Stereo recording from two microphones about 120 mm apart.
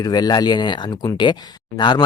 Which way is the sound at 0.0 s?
35° left (ahead or behind).